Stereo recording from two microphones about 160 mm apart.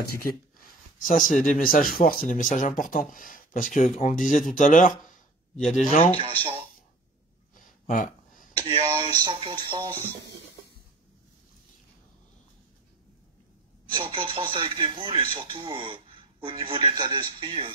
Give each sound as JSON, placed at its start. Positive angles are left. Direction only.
{"t": 0.0, "sound": "speech", "side_deg": 65}
{"t": 7.5, "sound": "a sound", "side_deg": 55}
{"t": 8.6, "sound": "a man's voice", "side_deg": -35}
{"t": 13.9, "sound": "a man's voice", "side_deg": -30}